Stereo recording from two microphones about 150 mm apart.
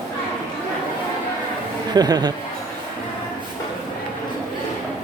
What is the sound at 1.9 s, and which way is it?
Speech, 25° right (ahead or behind).